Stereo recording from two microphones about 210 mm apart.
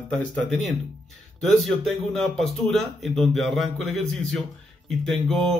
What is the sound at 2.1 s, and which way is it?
Speech, centre (ahead or behind).